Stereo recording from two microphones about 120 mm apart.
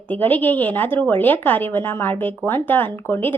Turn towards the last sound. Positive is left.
turn(degrees=15)  # may be behind; listen again after turning